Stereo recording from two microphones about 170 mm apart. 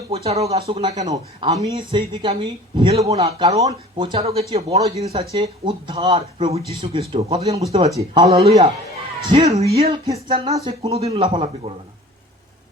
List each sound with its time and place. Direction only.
0.1 s speech: 35° right (ahead or behind)